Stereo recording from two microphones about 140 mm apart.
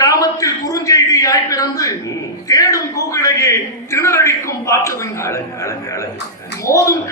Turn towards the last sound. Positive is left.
turn(degrees=20)  # may be behind; listen again after turning